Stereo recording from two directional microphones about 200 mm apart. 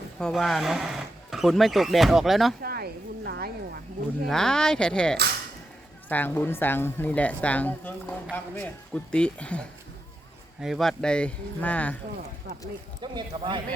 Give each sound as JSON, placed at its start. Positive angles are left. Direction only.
{"t": 0.2, "sound": "speech", "side_deg": 0}
{"t": 2.6, "sound": "chop", "side_deg": -50}
{"t": 4.3, "sound": "a woman's voice", "side_deg": 5}
{"t": 13.0, "sound": "speech", "side_deg": -25}